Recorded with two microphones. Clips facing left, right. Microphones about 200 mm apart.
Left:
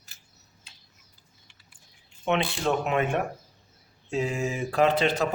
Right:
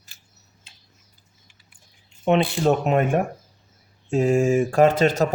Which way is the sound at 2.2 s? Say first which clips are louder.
Right 7 dB; 40° right (ahead or behind).